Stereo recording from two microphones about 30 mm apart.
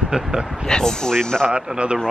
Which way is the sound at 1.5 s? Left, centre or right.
Right.